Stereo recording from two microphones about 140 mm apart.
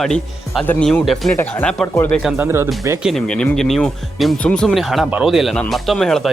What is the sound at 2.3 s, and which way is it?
Speech, 15° right (ahead or behind).